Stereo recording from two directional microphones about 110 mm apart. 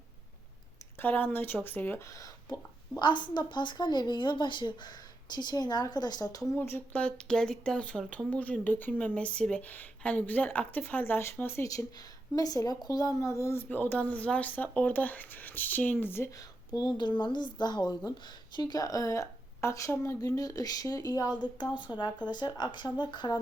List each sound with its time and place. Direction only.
0.9 s speech: 15° left (ahead or behind)
3.0 s speech: 45° left (ahead or behind)
6.6 s speech: 20° left (ahead or behind)
11.9 s speech: 35° left (ahead or behind)
16.3 s speech: 35° left (ahead or behind)